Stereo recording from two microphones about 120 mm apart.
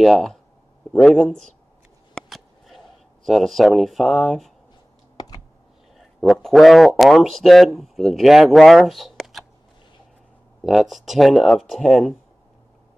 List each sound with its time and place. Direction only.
0.0 s speech: centre (ahead or behind)
2.1 s a sound: centre (ahead or behind)
3.3 s speech: centre (ahead or behind)
5.1 s computer keyboard: 35° left (ahead or behind)
5.9 s a man's voice: centre (ahead or behind)
10.6 s speech: centre (ahead or behind)